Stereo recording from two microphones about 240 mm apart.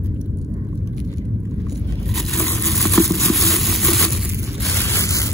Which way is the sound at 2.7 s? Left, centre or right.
Centre.